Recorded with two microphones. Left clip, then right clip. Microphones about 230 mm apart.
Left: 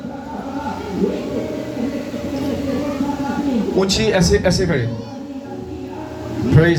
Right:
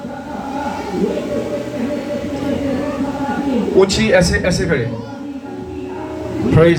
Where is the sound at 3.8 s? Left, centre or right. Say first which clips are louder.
Right 2 dB; left.